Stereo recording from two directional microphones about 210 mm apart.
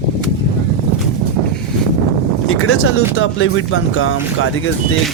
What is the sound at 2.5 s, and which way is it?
Speech, 90° left.